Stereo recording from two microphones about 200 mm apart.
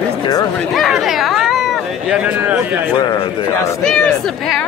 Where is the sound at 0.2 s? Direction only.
20° left (ahead or behind).